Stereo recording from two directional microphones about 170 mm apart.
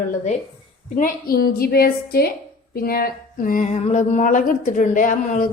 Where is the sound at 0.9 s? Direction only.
55° left (ahead or behind).